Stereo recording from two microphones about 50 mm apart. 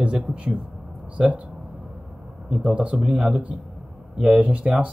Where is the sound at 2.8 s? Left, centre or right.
Right.